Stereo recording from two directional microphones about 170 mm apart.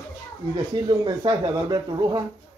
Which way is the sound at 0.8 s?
25° right (ahead or behind).